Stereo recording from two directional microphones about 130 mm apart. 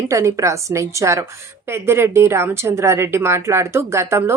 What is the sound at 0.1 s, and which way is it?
A woman's voice, 25° right (ahead or behind).